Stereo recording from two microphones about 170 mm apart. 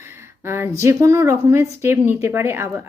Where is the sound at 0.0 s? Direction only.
15° right (ahead or behind).